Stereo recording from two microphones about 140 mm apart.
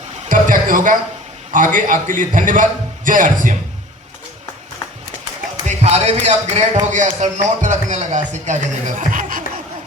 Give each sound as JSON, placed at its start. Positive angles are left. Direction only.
{"t": 0.3, "sound": "a sound", "side_deg": -70}
{"t": 1.5, "sound": "a man's voice", "side_deg": -70}
{"t": 5.6, "sound": "a man's voice", "side_deg": -50}